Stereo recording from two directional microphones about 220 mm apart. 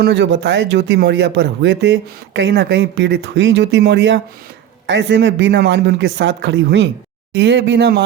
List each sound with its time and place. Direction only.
0.0 s speech: 55° right (ahead or behind)